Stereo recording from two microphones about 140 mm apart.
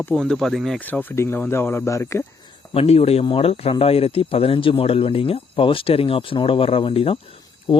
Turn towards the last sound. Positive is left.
turn(degrees=40)  # may be behind; listen again after turning